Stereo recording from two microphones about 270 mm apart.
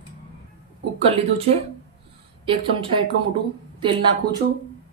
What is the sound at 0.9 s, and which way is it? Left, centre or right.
Speech, right.